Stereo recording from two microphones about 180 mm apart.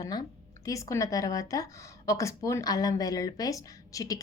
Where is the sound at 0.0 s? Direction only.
20° left (ahead or behind).